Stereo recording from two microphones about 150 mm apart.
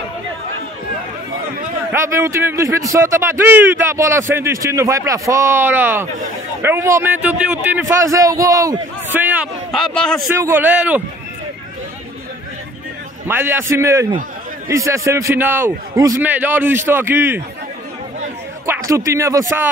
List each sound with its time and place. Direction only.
1.9 s a man's voice: 15° right (ahead or behind)
7.8 s a man's voice: 20° right (ahead or behind)
9.2 s a man's voice: 10° right (ahead or behind)
9.7 s speech: centre (ahead or behind)
10.3 s a man's voice: 15° right (ahead or behind)
13.3 s a man's voice: 15° right (ahead or behind)
18.7 s speech: 20° right (ahead or behind)